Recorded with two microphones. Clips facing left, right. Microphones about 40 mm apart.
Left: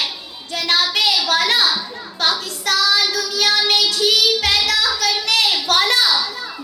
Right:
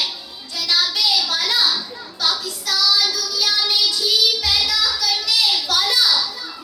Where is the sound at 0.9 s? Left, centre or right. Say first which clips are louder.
Left 3 dB; left.